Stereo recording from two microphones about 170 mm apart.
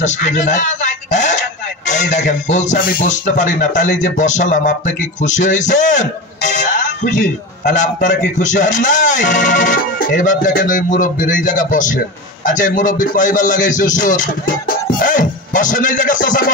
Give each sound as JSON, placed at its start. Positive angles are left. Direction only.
{"t": 0.0, "sound": "a man's voice", "side_deg": 45}